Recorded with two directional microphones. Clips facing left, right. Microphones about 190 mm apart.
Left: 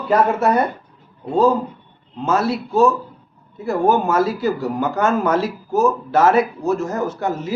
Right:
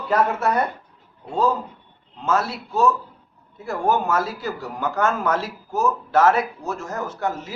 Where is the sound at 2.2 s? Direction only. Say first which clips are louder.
Left 4 dB; 10° left (ahead or behind).